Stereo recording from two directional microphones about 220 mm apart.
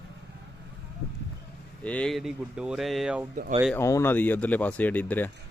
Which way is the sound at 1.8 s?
5° left (ahead or behind).